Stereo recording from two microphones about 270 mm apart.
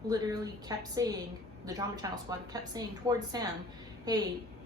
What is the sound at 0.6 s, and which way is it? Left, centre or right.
A woman's voice, centre.